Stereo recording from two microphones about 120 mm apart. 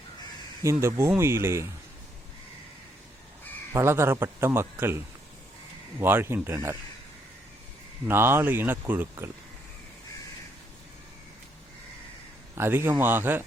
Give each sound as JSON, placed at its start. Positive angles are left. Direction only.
{"t": 0.6, "sound": "speech", "side_deg": -25}
{"t": 3.7, "sound": "speech", "side_deg": -20}
{"t": 8.0, "sound": "speech", "side_deg": -20}
{"t": 12.5, "sound": "speech", "side_deg": -20}